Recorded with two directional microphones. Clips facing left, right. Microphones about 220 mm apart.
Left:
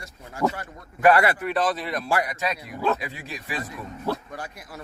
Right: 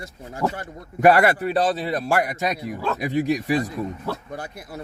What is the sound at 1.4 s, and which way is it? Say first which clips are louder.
Speech: right 3 dB; 30° right (ahead or behind).